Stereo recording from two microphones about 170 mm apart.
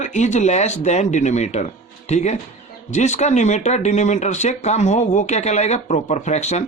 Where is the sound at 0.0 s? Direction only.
45° left (ahead or behind).